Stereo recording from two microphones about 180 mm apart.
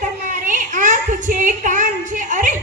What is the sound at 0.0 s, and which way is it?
Child singing, 45° right (ahead or behind).